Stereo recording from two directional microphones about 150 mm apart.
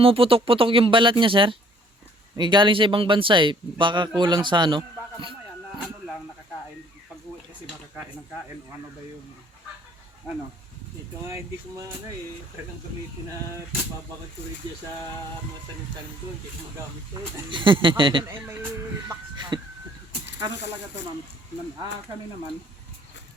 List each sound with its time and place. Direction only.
0.0 s speech: 40° right (ahead or behind)
17.5 s speech: 35° right (ahead or behind)